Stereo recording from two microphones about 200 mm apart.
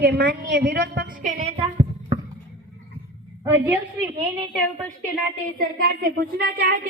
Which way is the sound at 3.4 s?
15° right (ahead or behind).